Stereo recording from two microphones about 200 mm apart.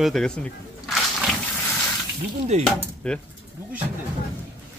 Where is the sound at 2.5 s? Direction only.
35° right (ahead or behind).